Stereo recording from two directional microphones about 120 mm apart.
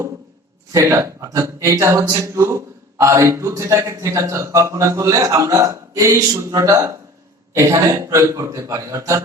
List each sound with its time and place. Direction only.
0.7 s speech: 25° right (ahead or behind)